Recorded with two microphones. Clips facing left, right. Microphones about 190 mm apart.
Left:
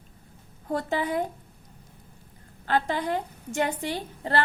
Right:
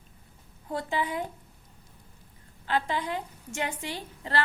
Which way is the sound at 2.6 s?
45° left (ahead or behind).